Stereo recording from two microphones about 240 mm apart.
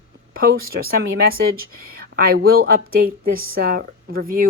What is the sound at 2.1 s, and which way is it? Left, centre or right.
Speech, right.